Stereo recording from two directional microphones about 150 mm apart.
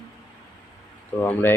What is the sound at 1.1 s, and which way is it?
Speech, 15° left (ahead or behind).